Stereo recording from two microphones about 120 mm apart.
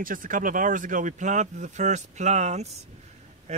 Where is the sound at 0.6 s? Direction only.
90° right.